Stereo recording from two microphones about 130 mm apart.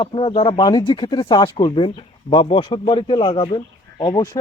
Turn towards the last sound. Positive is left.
turn(degrees=30)  # may be behind; listen again after turning